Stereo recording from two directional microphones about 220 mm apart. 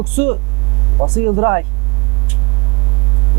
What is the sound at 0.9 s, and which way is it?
Speech, 25° right (ahead or behind).